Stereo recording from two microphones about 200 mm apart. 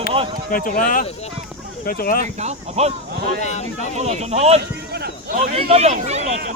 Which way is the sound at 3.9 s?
35° right (ahead or behind).